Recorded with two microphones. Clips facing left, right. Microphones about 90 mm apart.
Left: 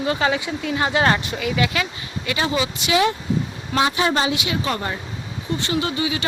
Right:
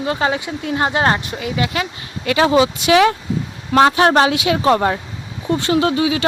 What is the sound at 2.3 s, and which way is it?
Speech, 70° right (ahead or behind).